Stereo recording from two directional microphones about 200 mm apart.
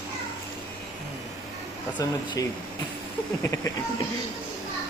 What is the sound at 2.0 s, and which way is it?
Speech, 15° left (ahead or behind).